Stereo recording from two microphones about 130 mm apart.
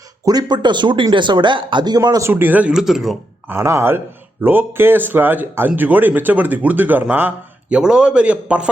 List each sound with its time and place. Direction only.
0.3 s speech: 30° right (ahead or behind)
2.3 s speech: 15° right (ahead or behind)
3.5 s a man's voice: 20° right (ahead or behind)